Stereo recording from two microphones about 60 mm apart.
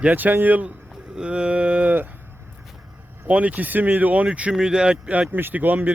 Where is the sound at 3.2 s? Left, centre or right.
Right.